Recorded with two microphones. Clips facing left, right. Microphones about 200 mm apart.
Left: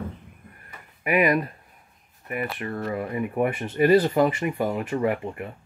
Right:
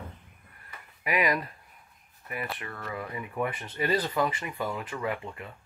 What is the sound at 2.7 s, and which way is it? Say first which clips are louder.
Speech: left 10 dB; 35° left (ahead or behind).